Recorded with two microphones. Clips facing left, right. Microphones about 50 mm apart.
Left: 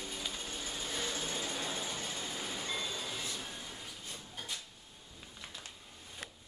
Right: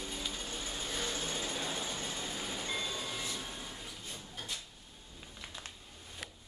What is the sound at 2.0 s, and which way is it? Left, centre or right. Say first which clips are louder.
Train: right 1 dB; centre.